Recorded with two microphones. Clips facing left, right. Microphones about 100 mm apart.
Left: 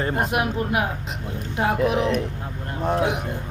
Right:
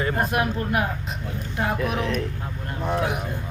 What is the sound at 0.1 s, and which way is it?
Speech, 20° left (ahead or behind).